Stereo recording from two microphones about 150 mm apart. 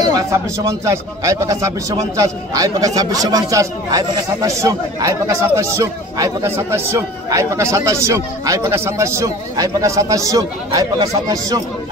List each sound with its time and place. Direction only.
0.1 s a man's voice: 20° right (ahead or behind)